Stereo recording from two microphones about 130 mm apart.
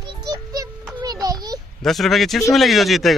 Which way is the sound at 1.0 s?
30° right (ahead or behind).